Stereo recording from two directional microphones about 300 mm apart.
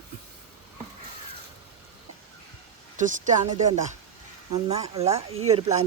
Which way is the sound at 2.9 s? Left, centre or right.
Right.